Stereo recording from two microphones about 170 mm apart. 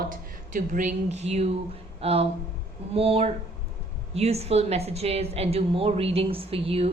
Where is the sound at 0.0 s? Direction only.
50° right (ahead or behind).